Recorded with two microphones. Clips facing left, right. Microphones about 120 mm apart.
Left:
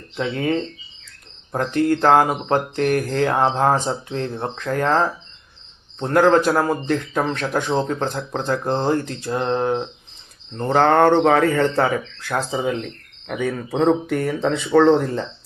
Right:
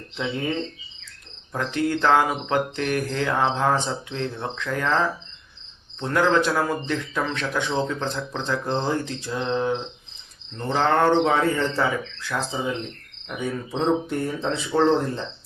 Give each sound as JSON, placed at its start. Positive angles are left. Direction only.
{"t": 1.5, "sound": "a man's voice", "side_deg": 45}
{"t": 13.2, "sound": "speech", "side_deg": 70}